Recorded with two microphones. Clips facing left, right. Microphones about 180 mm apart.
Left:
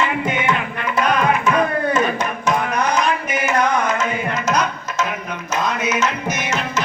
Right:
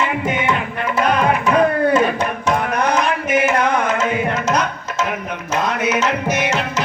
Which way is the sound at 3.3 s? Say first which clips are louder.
Right 6 dB; 50° right (ahead or behind).